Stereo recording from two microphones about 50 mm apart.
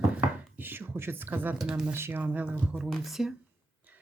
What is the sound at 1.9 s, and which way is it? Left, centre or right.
Speech, right.